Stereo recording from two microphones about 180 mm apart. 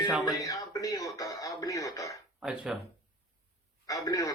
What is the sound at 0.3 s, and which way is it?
Music, 20° left (ahead or behind).